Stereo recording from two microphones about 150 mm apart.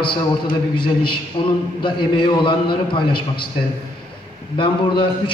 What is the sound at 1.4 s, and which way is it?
A man's voice, 35° left (ahead or behind).